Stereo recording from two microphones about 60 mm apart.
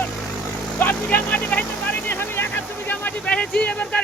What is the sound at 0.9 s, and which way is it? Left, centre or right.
Vehicle, left.